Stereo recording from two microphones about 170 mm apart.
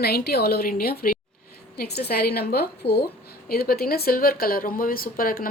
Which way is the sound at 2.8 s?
80° left.